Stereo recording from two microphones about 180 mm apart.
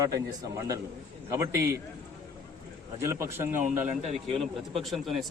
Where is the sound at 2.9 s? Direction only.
15° right (ahead or behind).